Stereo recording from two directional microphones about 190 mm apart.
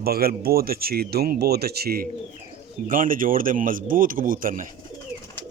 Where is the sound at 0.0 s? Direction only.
50° right (ahead or behind).